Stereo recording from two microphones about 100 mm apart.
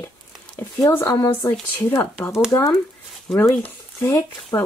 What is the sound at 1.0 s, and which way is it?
Speech, 35° left (ahead or behind).